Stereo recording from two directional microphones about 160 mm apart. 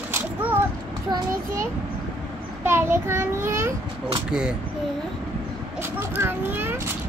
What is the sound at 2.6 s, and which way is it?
A child's voice, 15° right (ahead or behind).